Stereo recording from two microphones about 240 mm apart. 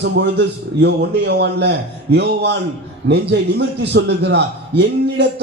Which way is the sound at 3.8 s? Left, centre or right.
Right.